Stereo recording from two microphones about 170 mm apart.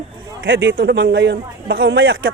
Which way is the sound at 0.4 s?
90° right.